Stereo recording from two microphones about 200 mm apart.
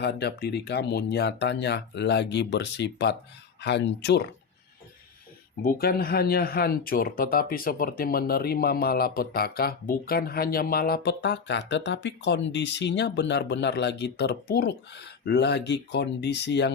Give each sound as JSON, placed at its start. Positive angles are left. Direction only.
{"t": 0.0, "sound": "speech", "side_deg": 55}
{"t": 5.6, "sound": "speech", "side_deg": 50}